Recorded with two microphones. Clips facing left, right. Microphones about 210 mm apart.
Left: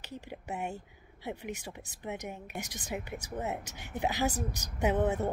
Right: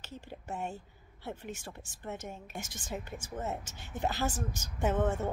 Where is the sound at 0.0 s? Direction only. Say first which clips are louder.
Left 3 dB; 15° left (ahead or behind).